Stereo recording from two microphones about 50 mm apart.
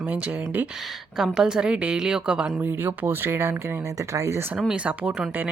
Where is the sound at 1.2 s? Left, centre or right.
Centre.